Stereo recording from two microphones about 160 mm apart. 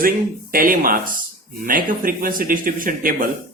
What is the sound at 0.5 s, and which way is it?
Speech, 60° right (ahead or behind).